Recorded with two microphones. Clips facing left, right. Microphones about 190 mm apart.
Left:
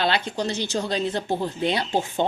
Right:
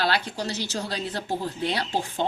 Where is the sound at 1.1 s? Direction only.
25° left (ahead or behind).